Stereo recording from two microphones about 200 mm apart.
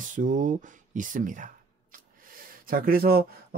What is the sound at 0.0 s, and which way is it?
Speech, 40° right (ahead or behind).